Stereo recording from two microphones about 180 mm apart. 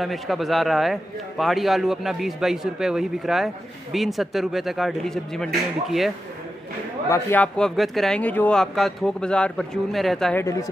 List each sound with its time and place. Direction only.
0.0 s a man's voice: centre (ahead or behind)
7.1 s a man's voice: 10° left (ahead or behind)
10.4 s speech: 20° left (ahead or behind)